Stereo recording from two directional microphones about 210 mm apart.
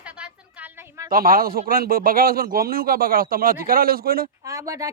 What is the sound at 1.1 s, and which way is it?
Speech, 45° right (ahead or behind).